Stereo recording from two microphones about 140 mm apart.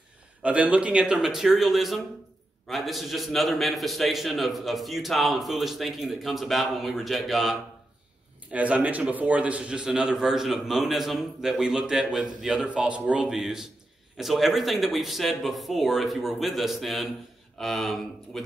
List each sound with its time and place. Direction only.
0.4 s a man's voice: 10° right (ahead or behind)